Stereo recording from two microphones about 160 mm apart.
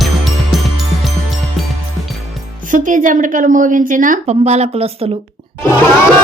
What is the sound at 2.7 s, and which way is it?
Speech, 55° right (ahead or behind).